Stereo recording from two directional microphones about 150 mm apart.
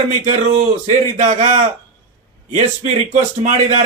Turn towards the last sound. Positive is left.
turn(degrees=-50)  # may be behind; listen again after turning